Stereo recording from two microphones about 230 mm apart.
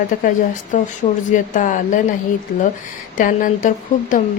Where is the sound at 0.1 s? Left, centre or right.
Left.